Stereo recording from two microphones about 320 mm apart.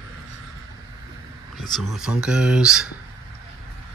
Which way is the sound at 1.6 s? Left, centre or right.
Centre.